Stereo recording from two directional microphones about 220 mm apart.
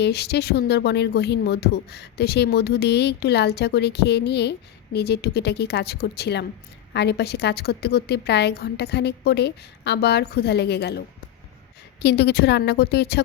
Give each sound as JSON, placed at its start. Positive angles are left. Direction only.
{"t": 0.0, "sound": "speech", "side_deg": 50}
{"t": 12.0, "sound": "speech", "side_deg": 50}